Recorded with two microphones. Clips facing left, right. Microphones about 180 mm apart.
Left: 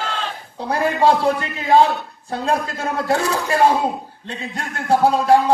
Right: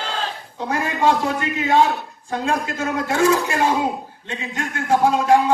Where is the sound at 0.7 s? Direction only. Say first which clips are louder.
Left 3 dB; 35° left (ahead or behind).